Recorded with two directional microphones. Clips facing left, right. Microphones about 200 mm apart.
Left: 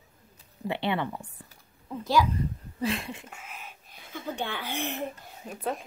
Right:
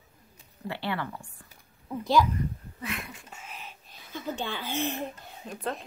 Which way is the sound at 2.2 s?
30° left (ahead or behind).